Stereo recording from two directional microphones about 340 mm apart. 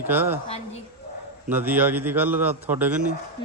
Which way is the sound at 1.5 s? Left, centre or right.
Centre.